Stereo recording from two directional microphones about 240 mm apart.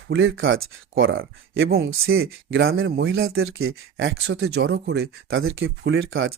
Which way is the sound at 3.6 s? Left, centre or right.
Right.